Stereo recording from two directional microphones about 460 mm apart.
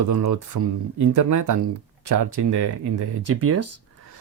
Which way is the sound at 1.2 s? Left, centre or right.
Right.